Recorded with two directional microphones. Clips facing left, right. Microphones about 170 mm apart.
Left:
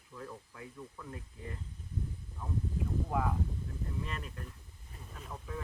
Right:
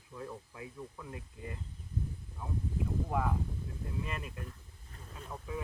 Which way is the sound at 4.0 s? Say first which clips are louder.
Right 1 dB; 10° right (ahead or behind).